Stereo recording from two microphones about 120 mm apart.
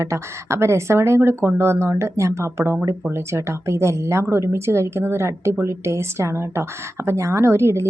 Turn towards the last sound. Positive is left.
turn(degrees=-20)  # may be behind; listen again after turning